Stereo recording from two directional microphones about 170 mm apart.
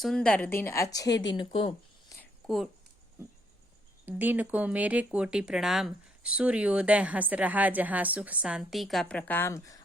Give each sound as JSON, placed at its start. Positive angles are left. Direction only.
{"t": 0.0, "sound": "a woman's voice", "side_deg": 5}
{"t": 4.0, "sound": "speech", "side_deg": -10}